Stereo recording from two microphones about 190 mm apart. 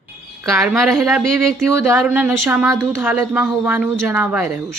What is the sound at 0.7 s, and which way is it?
A woman's voice, centre (ahead or behind).